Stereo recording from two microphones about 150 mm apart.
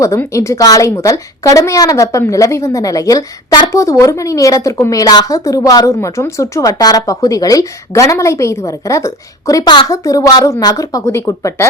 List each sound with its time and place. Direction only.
0.0 s a woman's voice: 20° left (ahead or behind)